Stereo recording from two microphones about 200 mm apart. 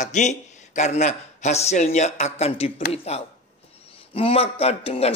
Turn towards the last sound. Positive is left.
turn(degrees=30)  # may be behind; listen again after turning